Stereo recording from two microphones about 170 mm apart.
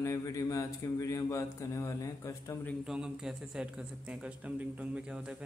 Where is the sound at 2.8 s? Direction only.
5° right (ahead or behind).